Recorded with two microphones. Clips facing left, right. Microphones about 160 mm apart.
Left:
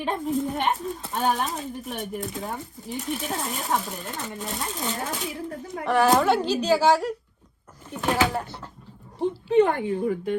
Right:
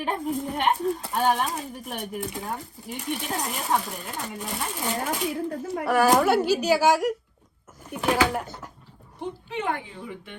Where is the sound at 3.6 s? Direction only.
Centre (ahead or behind).